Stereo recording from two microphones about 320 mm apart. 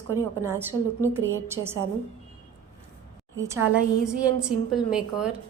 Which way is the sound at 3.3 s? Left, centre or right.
Right.